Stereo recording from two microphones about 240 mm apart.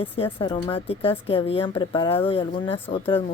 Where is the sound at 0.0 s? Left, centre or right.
Left.